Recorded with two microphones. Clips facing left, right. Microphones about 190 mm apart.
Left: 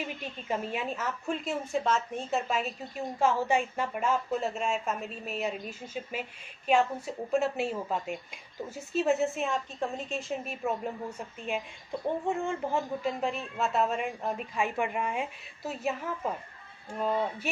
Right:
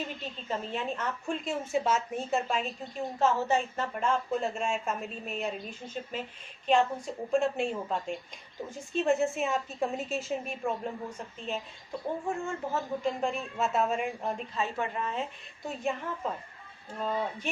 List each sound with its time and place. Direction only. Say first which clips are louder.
0.2 s a woman's voice: left 2 dB; 10° left (ahead or behind)
13.0 s a woman's voice: right 1 dB; 5° left (ahead or behind)